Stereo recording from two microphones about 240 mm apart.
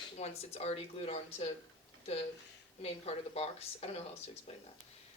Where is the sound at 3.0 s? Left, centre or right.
Left.